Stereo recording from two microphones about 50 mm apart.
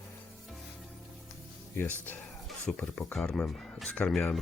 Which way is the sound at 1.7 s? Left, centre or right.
Left.